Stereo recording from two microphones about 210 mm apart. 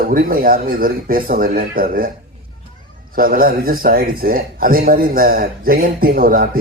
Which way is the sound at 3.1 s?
40° right (ahead or behind).